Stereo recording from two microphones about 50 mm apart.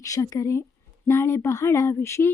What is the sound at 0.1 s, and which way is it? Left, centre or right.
Speech, left.